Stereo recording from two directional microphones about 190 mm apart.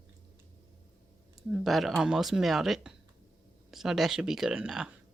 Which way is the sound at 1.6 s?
Centre (ahead or behind).